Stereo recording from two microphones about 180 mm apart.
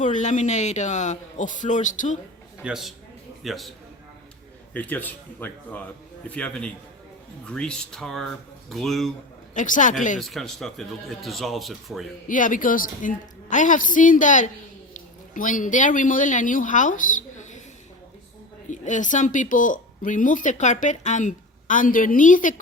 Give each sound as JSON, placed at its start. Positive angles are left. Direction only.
{"t": 0.0, "sound": "speech", "side_deg": 45}
{"t": 2.6, "sound": "a man's voice", "side_deg": 0}
{"t": 9.6, "sound": "speech", "side_deg": 45}
{"t": 10.2, "sound": "speech", "side_deg": 0}
{"t": 12.3, "sound": "speech", "side_deg": 45}
{"t": 18.7, "sound": "speech", "side_deg": 45}